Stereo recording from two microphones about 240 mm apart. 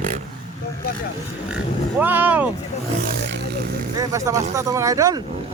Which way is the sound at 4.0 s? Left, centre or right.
Centre.